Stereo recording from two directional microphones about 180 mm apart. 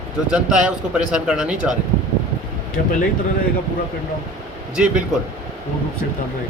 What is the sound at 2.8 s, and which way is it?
Speech, 55° left (ahead or behind).